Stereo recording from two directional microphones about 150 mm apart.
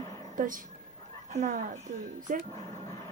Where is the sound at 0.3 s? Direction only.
65° right (ahead or behind).